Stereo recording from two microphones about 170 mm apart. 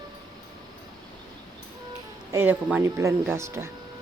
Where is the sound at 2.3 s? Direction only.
10° right (ahead or behind).